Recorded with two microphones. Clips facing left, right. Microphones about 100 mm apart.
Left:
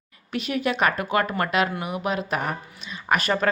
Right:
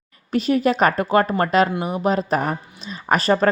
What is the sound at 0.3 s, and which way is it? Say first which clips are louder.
A woman's voice: right 7 dB; 35° right (ahead or behind).